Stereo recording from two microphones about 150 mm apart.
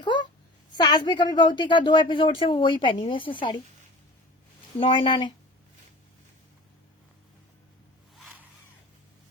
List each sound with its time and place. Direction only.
0.0 s a sound: 30° left (ahead or behind)
0.8 s a woman's voice: 30° left (ahead or behind)
4.8 s a woman's voice: 35° left (ahead or behind)